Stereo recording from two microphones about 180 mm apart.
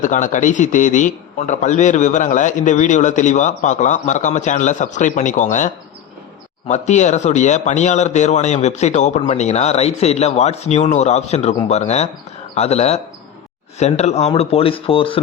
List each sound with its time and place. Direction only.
0.0 s a man's voice: 45° left (ahead or behind)